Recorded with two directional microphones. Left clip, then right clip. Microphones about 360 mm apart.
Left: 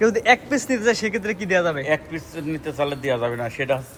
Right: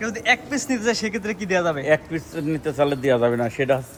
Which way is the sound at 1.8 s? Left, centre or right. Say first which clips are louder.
Right 3 dB; right.